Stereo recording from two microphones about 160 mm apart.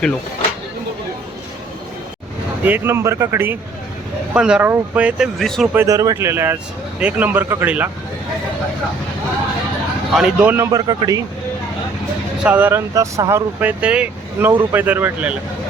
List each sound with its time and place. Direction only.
2.6 s speech: 15° right (ahead or behind); by 5.6 s centre (ahead or behind)
5.7 s speech: 20° right (ahead or behind)
10.2 s speech: 10° right (ahead or behind)
10.7 s speech: 25° right (ahead or behind)
12.4 s speech: 10° right (ahead or behind)